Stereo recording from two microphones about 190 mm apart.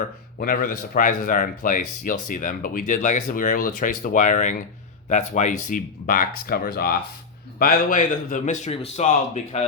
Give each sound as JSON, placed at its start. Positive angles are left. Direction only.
{"t": 0.3, "sound": "a man's voice", "side_deg": 45}